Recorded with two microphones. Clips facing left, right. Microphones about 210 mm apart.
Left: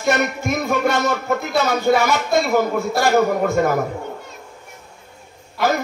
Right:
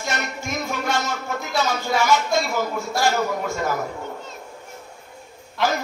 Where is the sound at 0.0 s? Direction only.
55° left (ahead or behind).